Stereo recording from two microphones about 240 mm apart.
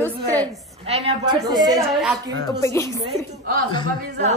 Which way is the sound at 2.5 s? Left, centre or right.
Centre.